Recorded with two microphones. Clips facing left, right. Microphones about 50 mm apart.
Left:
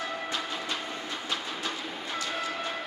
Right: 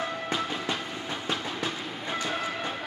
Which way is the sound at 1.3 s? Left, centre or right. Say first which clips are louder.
Right 2 dB; centre.